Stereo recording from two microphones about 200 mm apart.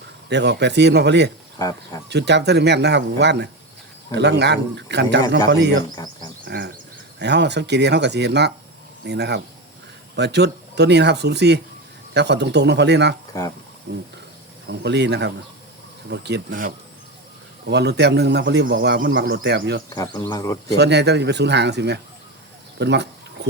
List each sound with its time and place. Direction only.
0.3 s speech: 60° right (ahead or behind)
1.5 s speech: 20° left (ahead or behind)
2.0 s speech: 60° right (ahead or behind)
7.2 s speech: 60° right (ahead or behind)
17.7 s speech: 55° right (ahead or behind)
19.9 s speech: 20° left (ahead or behind)
20.7 s speech: 55° right (ahead or behind)
22.8 s a sound: 60° right (ahead or behind)